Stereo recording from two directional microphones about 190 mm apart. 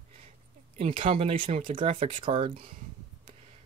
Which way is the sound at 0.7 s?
30° right (ahead or behind).